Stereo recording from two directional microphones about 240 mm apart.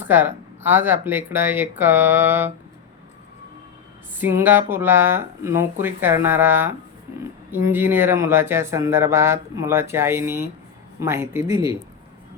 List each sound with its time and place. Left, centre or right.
0.0 s speech: centre
4.2 s speech: centre